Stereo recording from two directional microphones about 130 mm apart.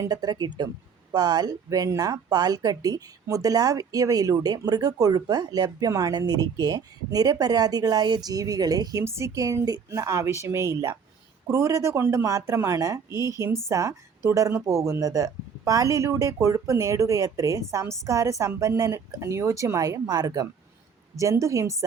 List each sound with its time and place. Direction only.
0.0 s speech: 30° right (ahead or behind)